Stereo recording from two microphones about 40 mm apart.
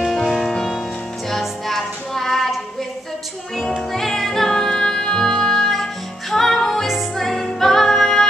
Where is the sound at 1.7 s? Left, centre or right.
Centre.